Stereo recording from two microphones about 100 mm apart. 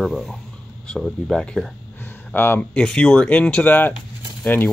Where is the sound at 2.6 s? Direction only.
10° left (ahead or behind).